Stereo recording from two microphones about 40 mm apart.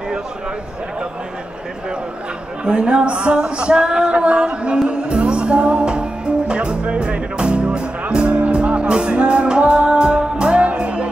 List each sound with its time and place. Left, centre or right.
2.6 s speech: right
4.8 s music: right